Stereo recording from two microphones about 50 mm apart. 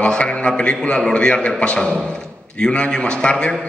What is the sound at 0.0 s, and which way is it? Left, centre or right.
A man's voice, left.